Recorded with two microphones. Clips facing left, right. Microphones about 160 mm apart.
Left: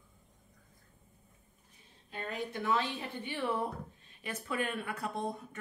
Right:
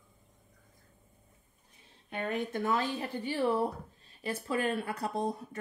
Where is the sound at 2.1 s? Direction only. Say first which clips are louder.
Right 5 dB; 50° right (ahead or behind).